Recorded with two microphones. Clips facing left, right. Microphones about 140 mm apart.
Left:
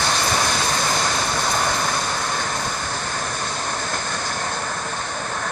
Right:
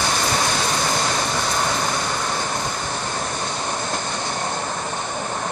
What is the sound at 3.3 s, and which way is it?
Vehicle, 15° right (ahead or behind).